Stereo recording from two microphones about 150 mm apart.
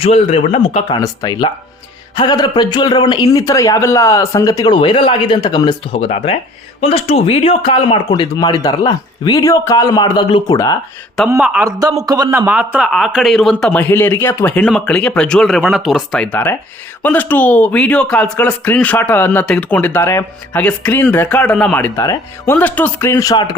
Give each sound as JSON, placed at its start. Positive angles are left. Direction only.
{"t": 0.0, "sound": "speech", "side_deg": 40}
{"t": 0.9, "sound": "speech", "side_deg": 25}
{"t": 5.9, "sound": "speech", "side_deg": 40}
{"t": 11.3, "sound": "speech", "side_deg": -5}
{"t": 11.6, "sound": "a man's voice", "side_deg": -25}
{"t": 13.9, "sound": "a man's voice", "side_deg": 15}
{"t": 21.9, "sound": "speech", "side_deg": 20}
{"t": 22.5, "sound": "speech", "side_deg": 10}
{"t": 23.3, "sound": "speech", "side_deg": 30}